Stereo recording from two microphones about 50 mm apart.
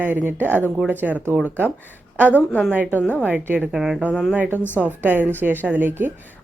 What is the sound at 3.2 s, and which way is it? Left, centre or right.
Speech, right.